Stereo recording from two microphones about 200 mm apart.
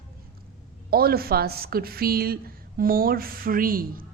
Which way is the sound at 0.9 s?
50° right (ahead or behind).